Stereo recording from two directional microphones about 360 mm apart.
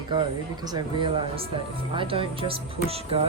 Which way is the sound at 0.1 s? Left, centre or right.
Centre.